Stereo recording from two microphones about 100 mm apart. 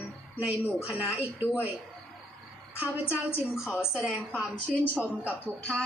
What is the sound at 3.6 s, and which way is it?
Speech, 25° left (ahead or behind).